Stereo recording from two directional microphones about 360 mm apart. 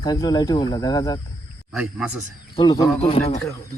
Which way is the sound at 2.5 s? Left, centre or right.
Centre.